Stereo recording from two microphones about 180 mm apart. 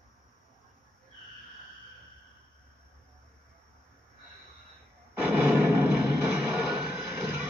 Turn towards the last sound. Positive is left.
turn(degrees=-10)  # may be behind; listen again after turning